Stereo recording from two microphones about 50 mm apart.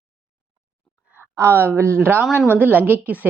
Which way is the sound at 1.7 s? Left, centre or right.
Right.